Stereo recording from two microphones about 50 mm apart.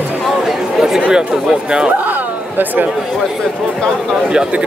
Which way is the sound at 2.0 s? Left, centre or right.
Right.